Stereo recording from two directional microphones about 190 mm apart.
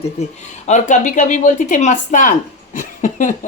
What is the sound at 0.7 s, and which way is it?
Speech, 40° left (ahead or behind).